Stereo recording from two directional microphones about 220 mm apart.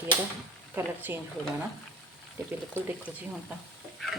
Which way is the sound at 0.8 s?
10° right (ahead or behind).